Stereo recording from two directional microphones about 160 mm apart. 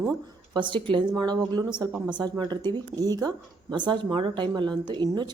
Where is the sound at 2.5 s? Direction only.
25° right (ahead or behind).